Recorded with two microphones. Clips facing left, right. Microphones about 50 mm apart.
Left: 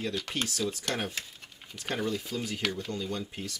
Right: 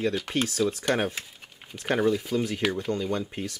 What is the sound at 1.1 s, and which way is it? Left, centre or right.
Speech, centre.